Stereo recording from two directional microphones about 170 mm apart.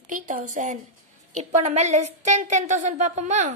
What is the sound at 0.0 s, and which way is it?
A woman's voice, 50° right (ahead or behind).